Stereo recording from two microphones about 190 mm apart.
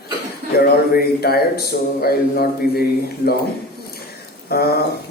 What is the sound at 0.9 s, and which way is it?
Speech, 55° left (ahead or behind).